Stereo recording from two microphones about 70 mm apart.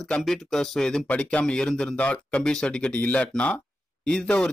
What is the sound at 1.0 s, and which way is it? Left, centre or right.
Speech, centre.